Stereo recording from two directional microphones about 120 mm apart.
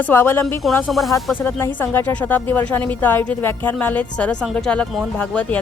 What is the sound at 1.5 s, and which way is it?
A woman's voice, 20° left (ahead or behind).